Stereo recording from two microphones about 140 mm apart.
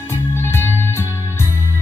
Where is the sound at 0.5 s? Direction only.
15° left (ahead or behind).